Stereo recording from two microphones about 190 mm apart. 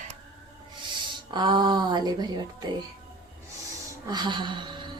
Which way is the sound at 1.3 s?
25° right (ahead or behind).